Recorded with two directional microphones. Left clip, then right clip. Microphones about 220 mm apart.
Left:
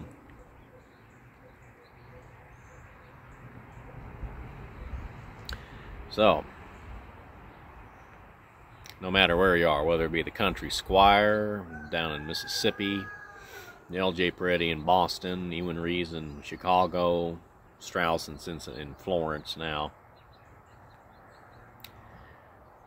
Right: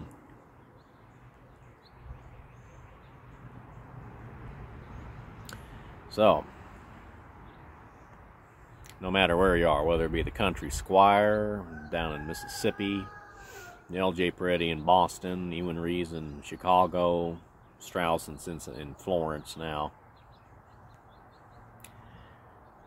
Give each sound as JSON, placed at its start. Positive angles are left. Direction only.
{"t": 6.1, "sound": "speech", "side_deg": 0}
{"t": 9.0, "sound": "speech", "side_deg": 0}
{"t": 12.8, "sound": "speech", "side_deg": 30}
{"t": 13.8, "sound": "speech", "side_deg": 0}